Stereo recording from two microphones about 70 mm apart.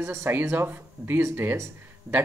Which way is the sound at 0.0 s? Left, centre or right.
Right.